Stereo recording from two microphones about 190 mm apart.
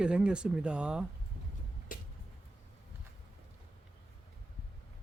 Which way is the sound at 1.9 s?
45° left (ahead or behind).